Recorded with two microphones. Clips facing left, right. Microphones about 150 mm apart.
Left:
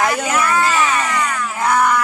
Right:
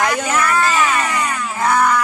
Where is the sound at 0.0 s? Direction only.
5° left (ahead or behind).